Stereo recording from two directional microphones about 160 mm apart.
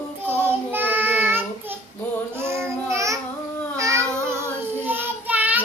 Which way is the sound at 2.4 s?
15° right (ahead or behind).